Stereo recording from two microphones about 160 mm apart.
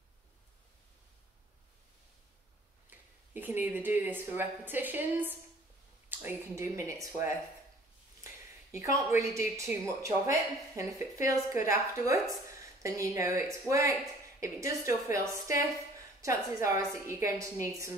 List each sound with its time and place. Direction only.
2.9 s speech: 10° right (ahead or behind)
8.7 s speech: 20° right (ahead or behind)